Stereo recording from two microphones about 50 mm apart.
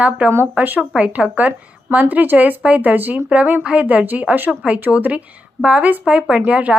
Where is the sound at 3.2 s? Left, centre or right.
Right.